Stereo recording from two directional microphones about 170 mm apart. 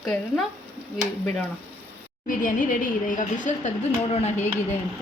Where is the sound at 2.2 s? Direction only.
50° left (ahead or behind).